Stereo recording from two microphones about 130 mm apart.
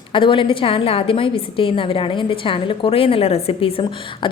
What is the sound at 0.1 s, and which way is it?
A woman's voice, 40° left (ahead or behind).